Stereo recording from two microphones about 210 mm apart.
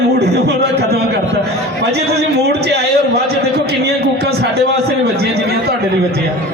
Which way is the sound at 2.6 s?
50° right (ahead or behind).